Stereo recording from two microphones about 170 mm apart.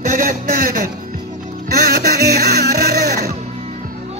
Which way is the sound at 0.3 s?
60° right (ahead or behind).